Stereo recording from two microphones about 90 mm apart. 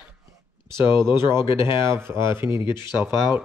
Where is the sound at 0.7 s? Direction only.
55° left (ahead or behind).